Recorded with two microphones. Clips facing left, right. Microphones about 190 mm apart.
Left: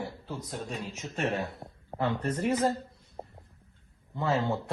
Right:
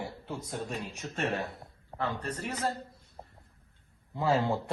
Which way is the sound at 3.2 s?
35° left (ahead or behind).